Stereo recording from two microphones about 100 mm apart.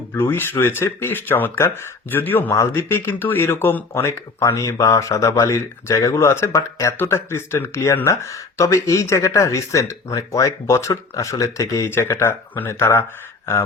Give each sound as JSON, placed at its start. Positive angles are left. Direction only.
{"t": 0.1, "sound": "speech", "side_deg": 25}